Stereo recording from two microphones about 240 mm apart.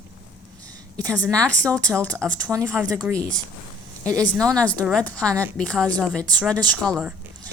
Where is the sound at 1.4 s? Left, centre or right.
Centre.